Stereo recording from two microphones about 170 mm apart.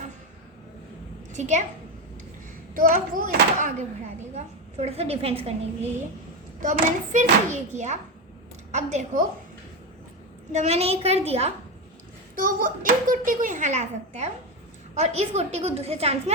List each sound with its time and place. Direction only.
1.3 s a child's voice: 45° right (ahead or behind)
2.7 s a child's voice: 55° right (ahead or behind)
4.4 s a woman's voice: 40° right (ahead or behind)
6.6 s a child's voice: 50° right (ahead or behind)
10.5 s a woman's voice: 40° right (ahead or behind)
12.4 s a child's voice: 55° right (ahead or behind); by 16.3 s 35° right (ahead or behind)